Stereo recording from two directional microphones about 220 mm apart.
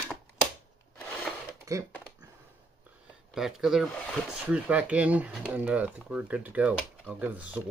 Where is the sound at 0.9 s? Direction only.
5° left (ahead or behind).